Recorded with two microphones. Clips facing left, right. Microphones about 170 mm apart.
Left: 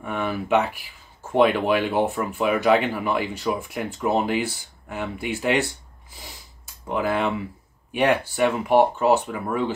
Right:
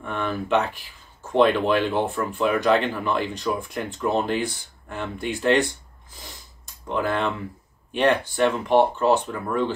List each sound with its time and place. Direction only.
0.0 s speech: 10° left (ahead or behind)
6.2 s a sound: 5° left (ahead or behind)
7.9 s speech: 10° left (ahead or behind)